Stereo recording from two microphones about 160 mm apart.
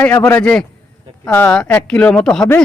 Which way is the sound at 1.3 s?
20° left (ahead or behind).